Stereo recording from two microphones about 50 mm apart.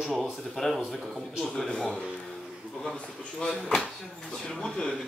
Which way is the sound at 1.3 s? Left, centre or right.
Centre.